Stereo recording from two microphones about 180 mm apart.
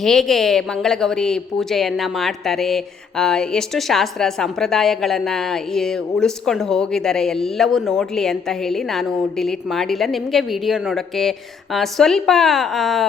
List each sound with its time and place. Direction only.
0.0 s a woman's voice: centre (ahead or behind)